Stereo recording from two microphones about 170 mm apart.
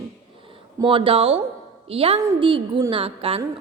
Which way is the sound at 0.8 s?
30° right (ahead or behind).